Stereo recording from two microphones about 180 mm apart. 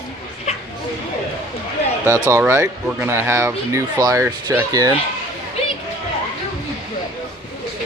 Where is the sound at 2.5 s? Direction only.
15° right (ahead or behind).